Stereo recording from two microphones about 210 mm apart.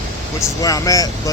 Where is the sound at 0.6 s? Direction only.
15° left (ahead or behind).